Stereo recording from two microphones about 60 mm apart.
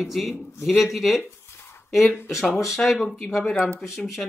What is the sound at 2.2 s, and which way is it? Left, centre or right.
A man's voice, centre.